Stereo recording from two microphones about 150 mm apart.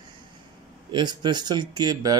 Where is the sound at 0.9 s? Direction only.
30° right (ahead or behind).